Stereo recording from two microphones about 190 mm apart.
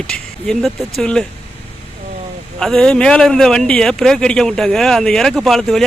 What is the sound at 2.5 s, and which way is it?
A man's voice, 5° left (ahead or behind).